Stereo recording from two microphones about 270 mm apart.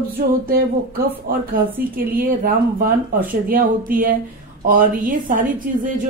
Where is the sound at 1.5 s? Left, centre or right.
Right.